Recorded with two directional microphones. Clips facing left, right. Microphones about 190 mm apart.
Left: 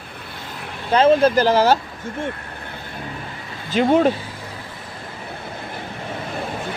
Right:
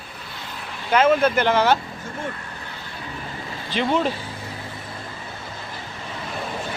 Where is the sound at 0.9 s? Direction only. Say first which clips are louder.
Left 3 dB; 30° left (ahead or behind).